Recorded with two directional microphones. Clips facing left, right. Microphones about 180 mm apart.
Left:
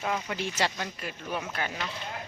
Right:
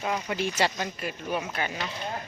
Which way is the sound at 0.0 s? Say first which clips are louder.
Right 2 dB; 10° right (ahead or behind).